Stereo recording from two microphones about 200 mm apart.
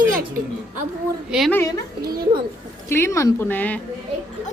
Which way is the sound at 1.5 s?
15° left (ahead or behind).